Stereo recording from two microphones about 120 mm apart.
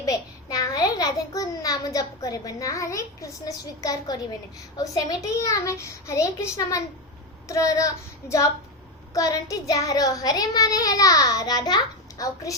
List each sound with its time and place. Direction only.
0.0 s a child's voice: 30° left (ahead or behind)